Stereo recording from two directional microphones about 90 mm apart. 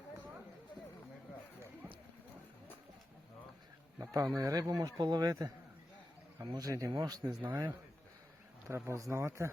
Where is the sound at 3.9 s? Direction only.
40° right (ahead or behind).